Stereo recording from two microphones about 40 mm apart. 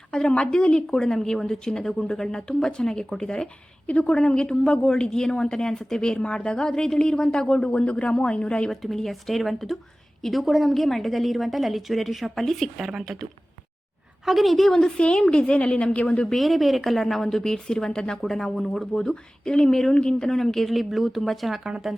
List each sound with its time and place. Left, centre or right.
0.1 s a man's voice: left
0.9 s a woman's voice: centre
3.8 s a woman's voice: left
4.1 s a man's voice: left
8.7 s a woman's voice: centre
14.3 s a woman's voice: centre
14.7 s a woman's voice: centre
14.9 s a man's voice: left
16.4 s a woman's voice: centre
18.2 s a woman's voice: centre
18.9 s a woman's voice: centre
20.2 s a woman's voice: centre